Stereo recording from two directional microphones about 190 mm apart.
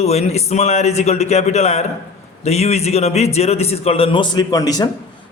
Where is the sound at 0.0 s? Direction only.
35° left (ahead or behind).